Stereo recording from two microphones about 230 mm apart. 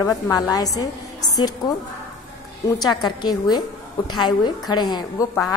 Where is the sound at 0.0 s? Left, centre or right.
Centre.